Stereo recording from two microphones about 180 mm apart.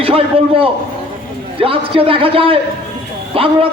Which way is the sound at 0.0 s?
30° right (ahead or behind).